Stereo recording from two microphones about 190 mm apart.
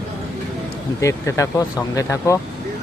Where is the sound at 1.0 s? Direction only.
15° left (ahead or behind).